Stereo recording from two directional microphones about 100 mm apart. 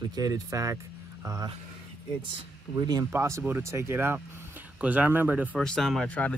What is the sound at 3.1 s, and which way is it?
Speech, 30° right (ahead or behind).